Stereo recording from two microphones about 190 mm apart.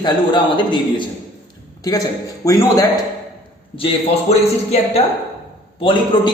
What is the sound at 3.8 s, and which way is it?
Speech, 30° left (ahead or behind).